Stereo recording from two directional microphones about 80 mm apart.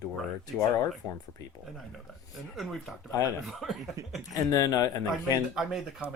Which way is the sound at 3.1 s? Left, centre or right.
Left.